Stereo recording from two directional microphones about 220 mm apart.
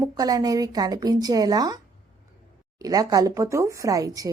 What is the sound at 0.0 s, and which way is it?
A woman's voice, 15° right (ahead or behind).